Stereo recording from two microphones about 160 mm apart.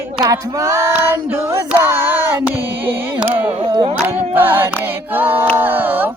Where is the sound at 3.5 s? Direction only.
35° right (ahead or behind).